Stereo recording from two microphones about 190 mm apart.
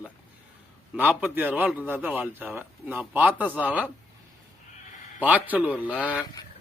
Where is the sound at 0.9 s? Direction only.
10° right (ahead or behind).